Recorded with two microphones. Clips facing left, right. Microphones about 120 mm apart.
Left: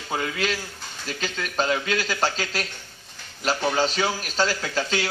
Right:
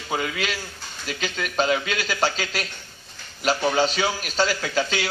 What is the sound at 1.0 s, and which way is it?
Speech, 30° left (ahead or behind).